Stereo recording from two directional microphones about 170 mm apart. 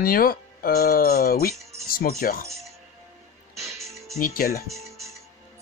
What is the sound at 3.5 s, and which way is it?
Music, 15° right (ahead or behind).